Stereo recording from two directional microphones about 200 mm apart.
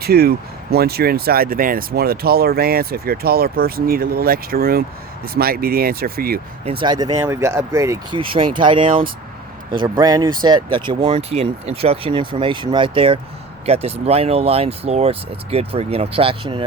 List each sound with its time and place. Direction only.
0.0 s speech: 50° right (ahead or behind)
6.7 s speech: 25° right (ahead or behind)